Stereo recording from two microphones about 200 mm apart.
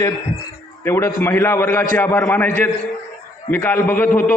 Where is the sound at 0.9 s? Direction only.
10° left (ahead or behind).